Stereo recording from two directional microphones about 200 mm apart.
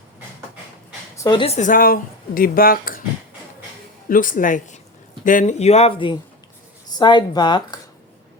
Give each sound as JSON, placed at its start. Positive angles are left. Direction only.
{"t": 1.1, "sound": "speech", "side_deg": 20}
{"t": 4.1, "sound": "speech", "side_deg": 40}